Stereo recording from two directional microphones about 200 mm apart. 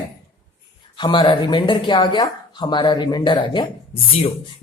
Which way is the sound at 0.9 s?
20° left (ahead or behind).